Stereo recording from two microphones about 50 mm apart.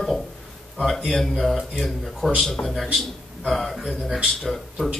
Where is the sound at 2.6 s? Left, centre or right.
Left.